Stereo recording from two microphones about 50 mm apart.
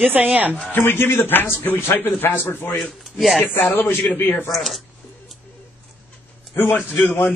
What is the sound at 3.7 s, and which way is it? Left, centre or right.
Speech, left.